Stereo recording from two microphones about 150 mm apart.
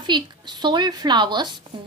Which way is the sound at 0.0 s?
30° right (ahead or behind).